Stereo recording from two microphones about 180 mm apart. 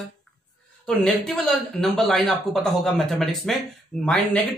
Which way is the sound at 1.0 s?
Centre (ahead or behind).